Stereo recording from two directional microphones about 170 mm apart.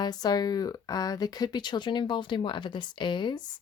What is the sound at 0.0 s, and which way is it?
Speech, 25° left (ahead or behind).